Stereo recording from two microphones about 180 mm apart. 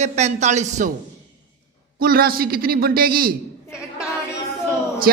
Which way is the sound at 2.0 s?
55° right (ahead or behind).